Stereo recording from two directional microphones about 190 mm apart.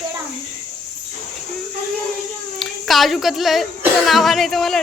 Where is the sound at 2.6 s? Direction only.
Centre (ahead or behind).